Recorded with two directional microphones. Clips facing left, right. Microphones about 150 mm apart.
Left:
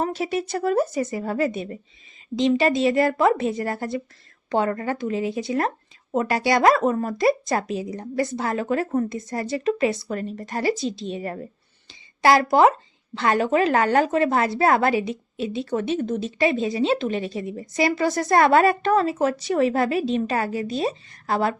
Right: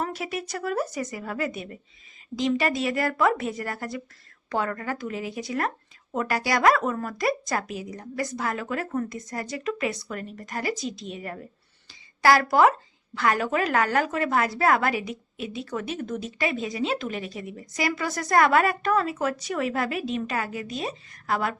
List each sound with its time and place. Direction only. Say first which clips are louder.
0.0 s a woman's voice: left 6 dB; 25° left (ahead or behind)